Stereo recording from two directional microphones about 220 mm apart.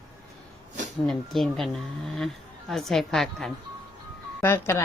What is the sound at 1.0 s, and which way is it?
Speech, centre (ahead or behind).